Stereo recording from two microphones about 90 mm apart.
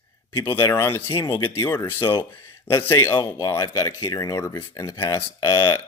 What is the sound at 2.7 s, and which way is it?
Speech, 30° left (ahead or behind).